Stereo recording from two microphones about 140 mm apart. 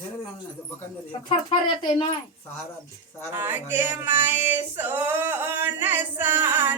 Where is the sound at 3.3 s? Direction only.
15° right (ahead or behind).